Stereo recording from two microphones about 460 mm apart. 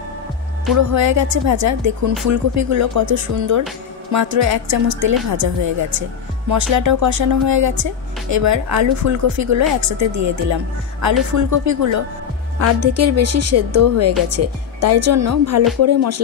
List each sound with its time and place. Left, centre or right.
0.7 s speech: right